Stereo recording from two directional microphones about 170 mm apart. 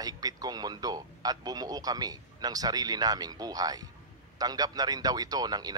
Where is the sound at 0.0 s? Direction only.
20° right (ahead or behind).